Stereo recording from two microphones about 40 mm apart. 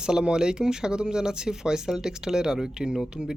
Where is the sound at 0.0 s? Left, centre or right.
Centre.